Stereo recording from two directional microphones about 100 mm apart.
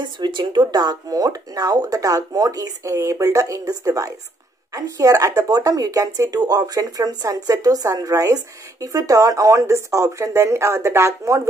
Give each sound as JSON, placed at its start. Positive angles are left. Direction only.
{"t": 0.2, "sound": "speech", "side_deg": -50}